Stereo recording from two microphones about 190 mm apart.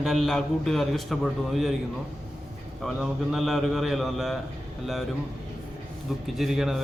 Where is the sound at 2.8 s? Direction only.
Centre (ahead or behind).